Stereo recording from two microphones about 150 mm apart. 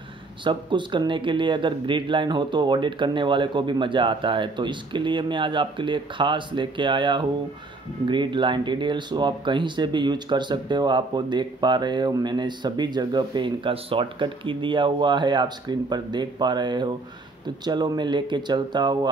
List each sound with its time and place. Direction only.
0.4 s speech: 30° right (ahead or behind)